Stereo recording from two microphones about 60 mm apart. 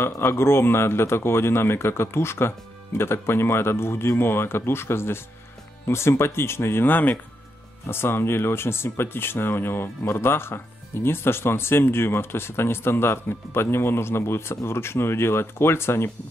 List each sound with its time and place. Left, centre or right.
0.0 s speech: left